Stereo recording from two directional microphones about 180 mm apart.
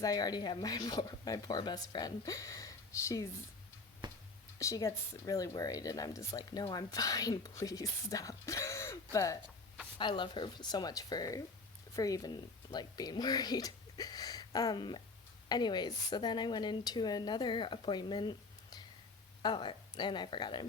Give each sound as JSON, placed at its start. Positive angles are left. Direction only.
{"t": 0.0, "sound": "speech", "side_deg": 20}
{"t": 4.0, "sound": "whispering", "side_deg": -25}
{"t": 4.6, "sound": "speech", "side_deg": 15}